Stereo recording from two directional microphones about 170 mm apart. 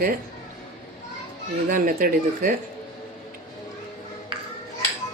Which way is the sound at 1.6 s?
55° right (ahead or behind).